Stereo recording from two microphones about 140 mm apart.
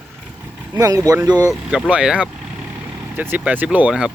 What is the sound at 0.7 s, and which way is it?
Speech, 25° right (ahead or behind).